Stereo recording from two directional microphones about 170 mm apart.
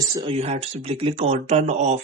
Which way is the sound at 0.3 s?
35° right (ahead or behind).